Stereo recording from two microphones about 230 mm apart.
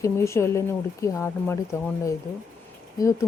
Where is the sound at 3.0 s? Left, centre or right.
Centre.